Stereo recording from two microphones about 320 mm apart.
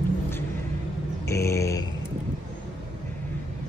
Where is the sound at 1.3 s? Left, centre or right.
Centre.